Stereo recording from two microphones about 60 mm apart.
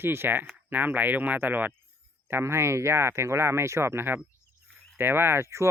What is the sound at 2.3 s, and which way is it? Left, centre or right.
Speech, right.